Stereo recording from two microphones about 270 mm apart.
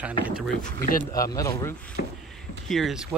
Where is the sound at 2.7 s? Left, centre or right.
Centre.